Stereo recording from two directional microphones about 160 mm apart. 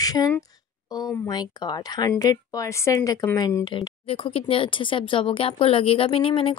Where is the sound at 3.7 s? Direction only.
30° left (ahead or behind).